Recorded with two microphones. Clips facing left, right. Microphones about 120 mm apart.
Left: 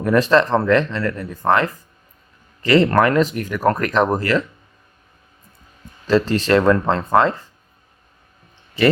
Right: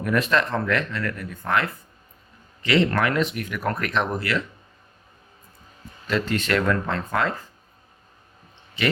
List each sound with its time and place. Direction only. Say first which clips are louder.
0.0 s speech: left 7 dB; 35° left (ahead or behind)
6.1 s speech: left 8 dB; 30° left (ahead or behind)